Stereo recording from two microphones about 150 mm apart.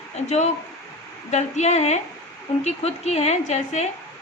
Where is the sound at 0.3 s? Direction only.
50° left (ahead or behind).